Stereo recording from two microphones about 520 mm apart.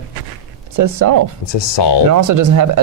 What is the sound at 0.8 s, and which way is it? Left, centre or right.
Speech, right.